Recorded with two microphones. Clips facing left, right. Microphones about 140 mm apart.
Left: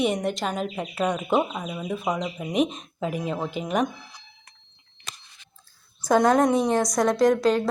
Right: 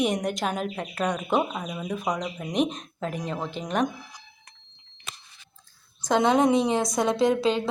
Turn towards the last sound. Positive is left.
turn(degrees=0)  # may be behind; listen again after turning